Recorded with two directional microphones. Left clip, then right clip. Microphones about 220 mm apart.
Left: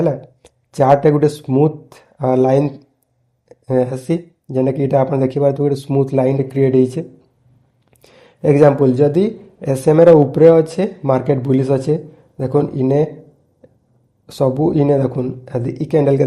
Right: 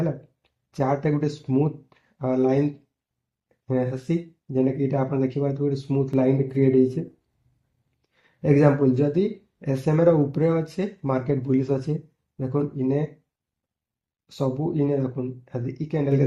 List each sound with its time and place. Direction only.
0.0 s speech: 35° left (ahead or behind)
3.7 s speech: 35° left (ahead or behind)
8.4 s speech: 35° left (ahead or behind)
14.3 s speech: 35° left (ahead or behind)